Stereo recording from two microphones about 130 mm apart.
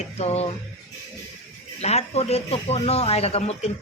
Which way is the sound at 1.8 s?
55° left (ahead or behind).